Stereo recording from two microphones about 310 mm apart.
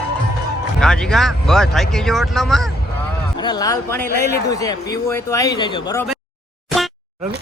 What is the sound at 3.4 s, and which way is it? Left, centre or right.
Speech, centre.